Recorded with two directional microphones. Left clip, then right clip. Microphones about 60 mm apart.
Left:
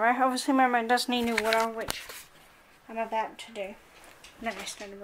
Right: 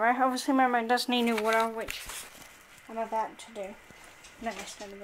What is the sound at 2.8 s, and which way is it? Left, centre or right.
Speech, centre.